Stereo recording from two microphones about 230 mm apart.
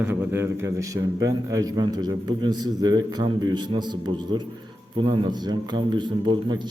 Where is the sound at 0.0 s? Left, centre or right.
Centre.